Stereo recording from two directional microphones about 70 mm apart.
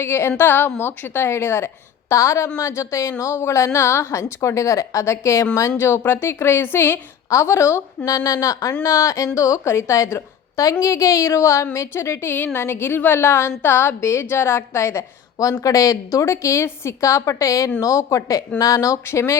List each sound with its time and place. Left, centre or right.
0.0 s a woman's voice: left
5.8 s a woman's voice: left
7.3 s a woman's voice: left
8.0 s a woman's voice: left
19.0 s a woman's voice: left